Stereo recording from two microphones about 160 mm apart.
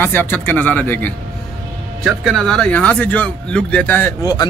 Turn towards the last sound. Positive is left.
turn(degrees=25)  # may be behind; listen again after turning